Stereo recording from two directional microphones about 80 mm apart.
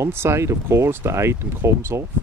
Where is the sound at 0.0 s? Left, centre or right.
Right.